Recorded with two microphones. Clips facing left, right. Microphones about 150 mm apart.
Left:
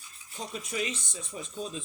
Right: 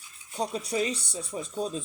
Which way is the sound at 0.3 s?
35° right (ahead or behind).